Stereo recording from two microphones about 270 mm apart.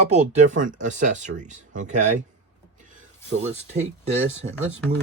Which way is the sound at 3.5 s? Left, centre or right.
Right.